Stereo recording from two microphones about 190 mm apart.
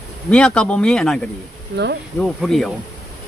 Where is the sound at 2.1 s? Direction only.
5° left (ahead or behind).